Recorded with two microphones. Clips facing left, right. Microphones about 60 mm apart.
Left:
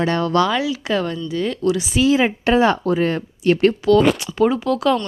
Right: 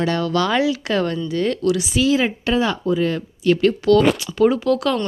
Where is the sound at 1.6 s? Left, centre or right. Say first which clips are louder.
Left 4 dB; left.